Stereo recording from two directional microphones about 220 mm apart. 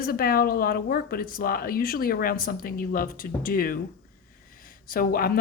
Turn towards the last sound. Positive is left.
turn(degrees=40)  # may be behind; listen again after turning